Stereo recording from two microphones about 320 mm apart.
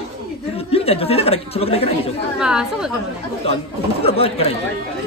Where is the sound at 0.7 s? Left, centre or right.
Centre.